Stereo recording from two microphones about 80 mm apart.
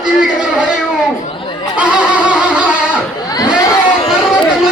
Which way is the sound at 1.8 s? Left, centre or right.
Centre.